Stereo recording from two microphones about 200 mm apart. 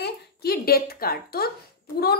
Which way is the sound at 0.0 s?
50° left (ahead or behind).